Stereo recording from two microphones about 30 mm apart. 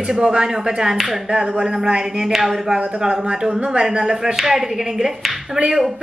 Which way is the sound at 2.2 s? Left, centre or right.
Centre.